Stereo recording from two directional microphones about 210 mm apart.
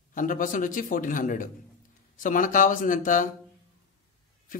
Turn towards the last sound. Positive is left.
turn(degrees=40)  # may be behind; listen again after turning